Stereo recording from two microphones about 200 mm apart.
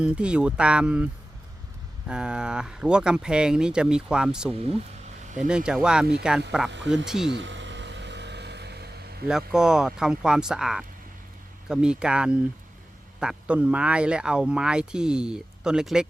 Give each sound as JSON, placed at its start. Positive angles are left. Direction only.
{"t": 0.0, "sound": "speech", "side_deg": -5}
{"t": 6.7, "sound": "speech", "side_deg": -65}
{"t": 6.9, "sound": "speech", "side_deg": 0}
{"t": 7.3, "sound": "vehicle", "side_deg": -65}
{"t": 9.2, "sound": "speech", "side_deg": -5}